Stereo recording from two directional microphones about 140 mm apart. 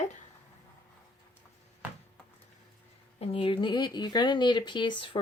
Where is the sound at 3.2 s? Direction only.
40° left (ahead or behind).